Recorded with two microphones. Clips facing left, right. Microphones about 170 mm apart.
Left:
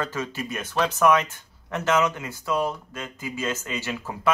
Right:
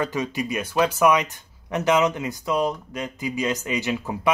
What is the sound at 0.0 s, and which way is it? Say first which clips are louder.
Speech: right 4 dB; 15° right (ahead or behind).